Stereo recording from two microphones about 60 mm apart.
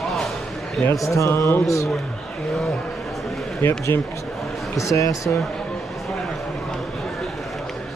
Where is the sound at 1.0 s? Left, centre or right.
Left.